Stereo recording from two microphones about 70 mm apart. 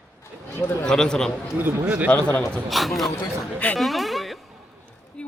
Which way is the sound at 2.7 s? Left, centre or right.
Centre.